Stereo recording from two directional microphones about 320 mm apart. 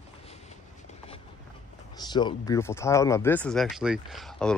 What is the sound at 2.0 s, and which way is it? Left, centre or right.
Speech, centre.